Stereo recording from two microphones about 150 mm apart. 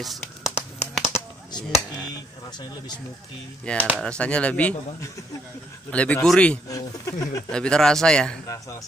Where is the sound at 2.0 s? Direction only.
25° left (ahead or behind).